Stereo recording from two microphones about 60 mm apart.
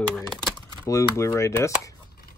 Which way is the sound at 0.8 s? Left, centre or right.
Left.